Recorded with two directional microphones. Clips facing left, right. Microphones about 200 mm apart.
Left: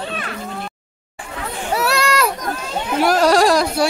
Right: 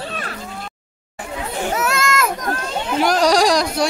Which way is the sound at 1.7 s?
35° left (ahead or behind).